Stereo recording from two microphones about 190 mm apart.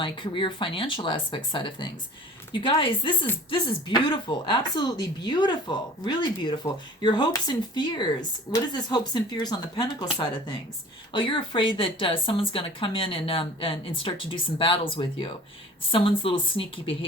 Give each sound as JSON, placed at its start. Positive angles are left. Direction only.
{"t": 0.0, "sound": "speech", "side_deg": 25}